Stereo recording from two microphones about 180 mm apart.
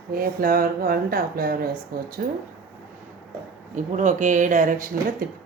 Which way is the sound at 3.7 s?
45° right (ahead or behind).